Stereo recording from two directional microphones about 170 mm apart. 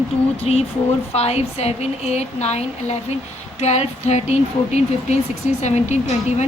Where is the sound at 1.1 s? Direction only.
40° left (ahead or behind).